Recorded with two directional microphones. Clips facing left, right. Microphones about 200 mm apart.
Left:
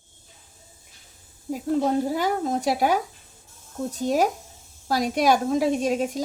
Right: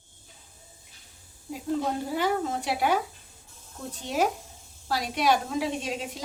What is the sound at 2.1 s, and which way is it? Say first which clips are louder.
A woman's voice: left 3 dB; 40° left (ahead or behind).